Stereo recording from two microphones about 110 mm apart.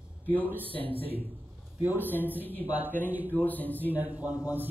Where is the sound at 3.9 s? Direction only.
15° right (ahead or behind).